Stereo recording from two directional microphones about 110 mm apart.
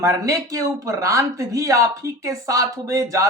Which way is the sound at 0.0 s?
30° right (ahead or behind).